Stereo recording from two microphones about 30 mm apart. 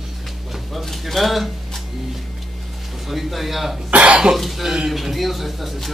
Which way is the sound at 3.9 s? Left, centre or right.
Right.